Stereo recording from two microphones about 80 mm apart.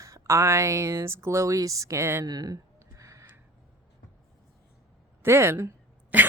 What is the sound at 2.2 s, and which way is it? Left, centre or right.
Speech, right.